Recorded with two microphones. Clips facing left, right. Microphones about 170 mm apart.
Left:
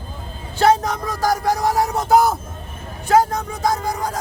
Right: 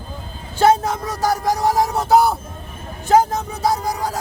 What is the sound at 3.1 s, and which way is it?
Speech, 25° right (ahead or behind).